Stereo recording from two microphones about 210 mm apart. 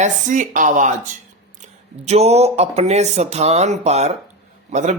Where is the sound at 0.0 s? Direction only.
35° right (ahead or behind).